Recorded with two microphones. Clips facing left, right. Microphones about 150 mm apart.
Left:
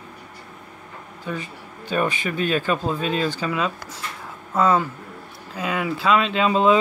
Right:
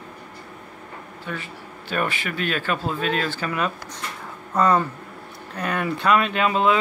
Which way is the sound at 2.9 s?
15° left (ahead or behind).